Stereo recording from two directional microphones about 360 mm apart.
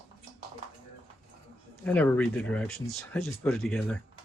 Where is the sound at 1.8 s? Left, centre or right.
Centre.